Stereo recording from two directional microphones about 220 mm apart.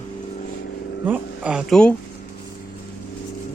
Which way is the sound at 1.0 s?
5° right (ahead or behind).